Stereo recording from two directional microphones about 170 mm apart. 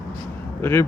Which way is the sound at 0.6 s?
15° left (ahead or behind).